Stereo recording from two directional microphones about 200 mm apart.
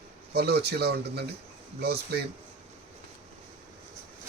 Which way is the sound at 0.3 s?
55° right (ahead or behind).